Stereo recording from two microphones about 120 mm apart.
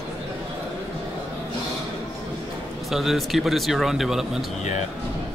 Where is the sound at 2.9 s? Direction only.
Centre (ahead or behind).